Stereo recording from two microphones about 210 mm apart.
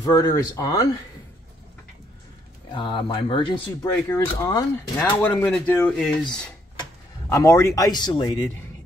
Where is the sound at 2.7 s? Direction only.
25° left (ahead or behind); by 6.1 s 5° left (ahead or behind).